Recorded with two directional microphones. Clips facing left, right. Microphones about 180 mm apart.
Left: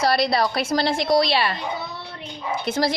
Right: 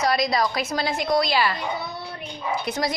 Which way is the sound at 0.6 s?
30° left (ahead or behind).